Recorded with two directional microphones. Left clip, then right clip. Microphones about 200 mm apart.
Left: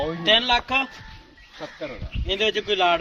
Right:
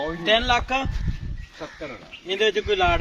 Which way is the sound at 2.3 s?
45° left (ahead or behind).